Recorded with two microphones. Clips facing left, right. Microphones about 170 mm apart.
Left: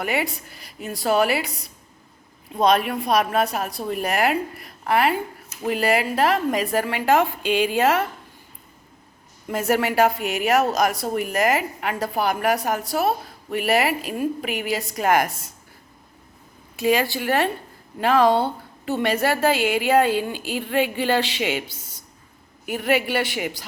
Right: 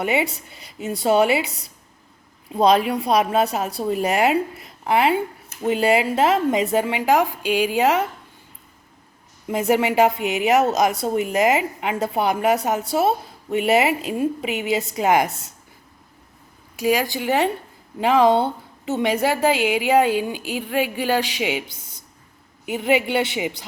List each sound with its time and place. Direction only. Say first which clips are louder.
0.0 s speech: right 3 dB; 25° right (ahead or behind)
2.6 s speech: right 2 dB; 25° right (ahead or behind)
9.5 s speech: right 2 dB; 15° right (ahead or behind)
16.7 s a woman's voice: even; 10° right (ahead or behind)